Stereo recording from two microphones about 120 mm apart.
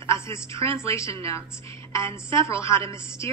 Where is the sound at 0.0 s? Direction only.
25° left (ahead or behind).